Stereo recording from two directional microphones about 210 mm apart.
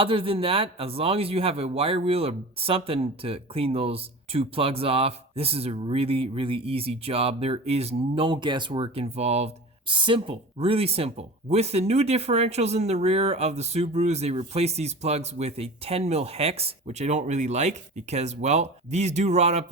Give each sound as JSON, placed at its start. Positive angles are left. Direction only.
{"t": 0.0, "sound": "a man's voice", "side_deg": -25}